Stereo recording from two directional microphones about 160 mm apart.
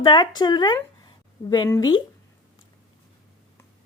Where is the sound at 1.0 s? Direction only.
25° left (ahead or behind).